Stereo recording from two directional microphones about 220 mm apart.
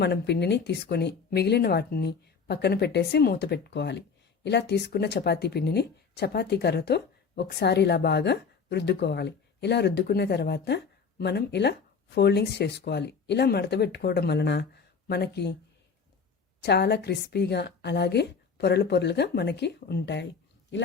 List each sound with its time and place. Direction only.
0.0 s speech: 50° left (ahead or behind)
16.6 s speech: 50° left (ahead or behind)